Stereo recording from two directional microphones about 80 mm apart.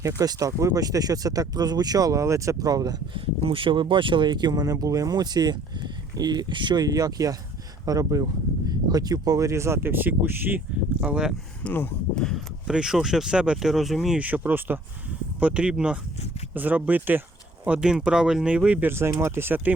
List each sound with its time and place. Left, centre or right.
0.2 s speech: right
3.5 s speech: right
4.6 s speech: right
6.8 s speech: right
11.0 s speech: centre
11.6 s speech: centre
12.6 s speech: centre
14.2 s speech: centre
17.7 s speech: centre
18.9 s speech: right